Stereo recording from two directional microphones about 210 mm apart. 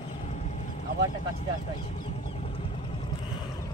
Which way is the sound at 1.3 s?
30° left (ahead or behind).